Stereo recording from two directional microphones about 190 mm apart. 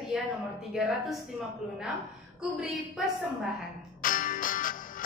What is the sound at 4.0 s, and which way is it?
Music, 45° left (ahead or behind).